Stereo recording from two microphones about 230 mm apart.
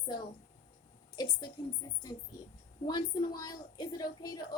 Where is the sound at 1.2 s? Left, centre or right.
Centre.